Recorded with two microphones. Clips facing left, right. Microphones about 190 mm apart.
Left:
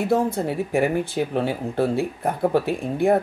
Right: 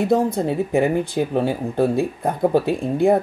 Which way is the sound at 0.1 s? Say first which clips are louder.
Right 3 dB; 20° right (ahead or behind).